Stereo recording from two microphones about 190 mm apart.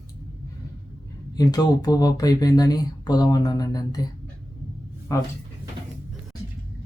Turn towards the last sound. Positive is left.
turn(degrees=15)  # may be behind; listen again after turning